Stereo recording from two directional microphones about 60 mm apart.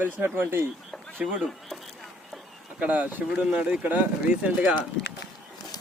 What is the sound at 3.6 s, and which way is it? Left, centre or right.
Speech, right.